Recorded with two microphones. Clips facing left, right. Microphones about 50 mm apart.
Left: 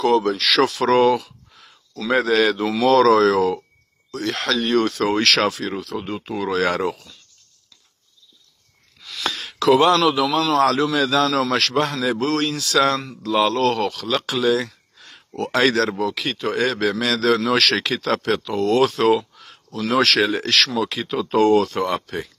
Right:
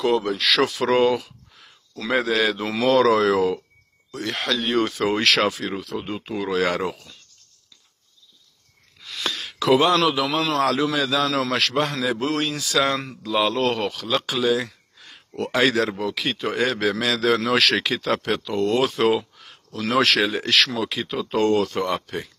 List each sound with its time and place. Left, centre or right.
0.0 s speech: centre
9.2 s a sound: centre
9.7 s speech: centre
10.3 s a man's voice: right
10.6 s speech: centre